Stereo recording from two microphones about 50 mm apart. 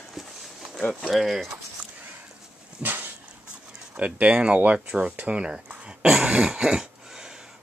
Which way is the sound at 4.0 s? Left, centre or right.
Right.